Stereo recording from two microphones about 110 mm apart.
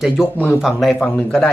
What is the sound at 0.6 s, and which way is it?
Speech, centre (ahead or behind).